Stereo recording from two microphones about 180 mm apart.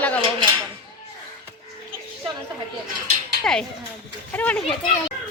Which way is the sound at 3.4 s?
5° left (ahead or behind).